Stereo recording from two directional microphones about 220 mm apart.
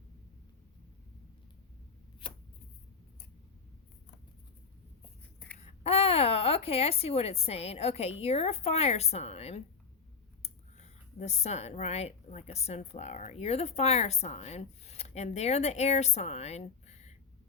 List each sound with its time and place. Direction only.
2.2 s shuffling cards: 25° left (ahead or behind)
5.5 s speech: 30° left (ahead or behind)